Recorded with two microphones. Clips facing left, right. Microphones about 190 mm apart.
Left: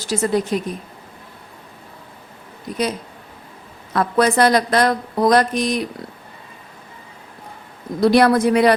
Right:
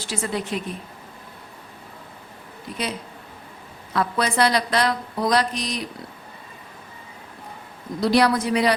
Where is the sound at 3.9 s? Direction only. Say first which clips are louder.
Left 6 dB; 50° left (ahead or behind).